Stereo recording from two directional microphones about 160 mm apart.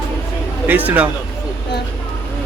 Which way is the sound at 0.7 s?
10° right (ahead or behind).